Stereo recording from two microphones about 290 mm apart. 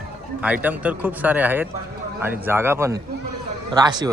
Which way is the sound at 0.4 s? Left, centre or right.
Centre.